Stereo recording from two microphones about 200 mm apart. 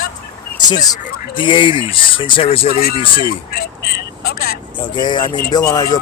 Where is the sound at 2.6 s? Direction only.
45° left (ahead or behind).